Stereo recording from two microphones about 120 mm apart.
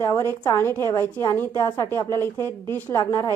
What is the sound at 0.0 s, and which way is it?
A woman's voice, 25° left (ahead or behind).